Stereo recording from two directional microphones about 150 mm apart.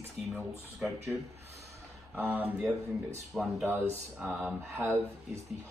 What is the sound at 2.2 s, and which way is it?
Speech, 10° right (ahead or behind).